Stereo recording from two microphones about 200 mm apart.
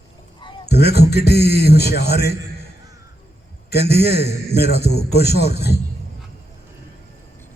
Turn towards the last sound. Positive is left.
turn(degrees=55)  # may be behind; listen again after turning